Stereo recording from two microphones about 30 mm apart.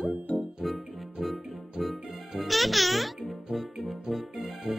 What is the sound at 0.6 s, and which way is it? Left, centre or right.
Music, centre.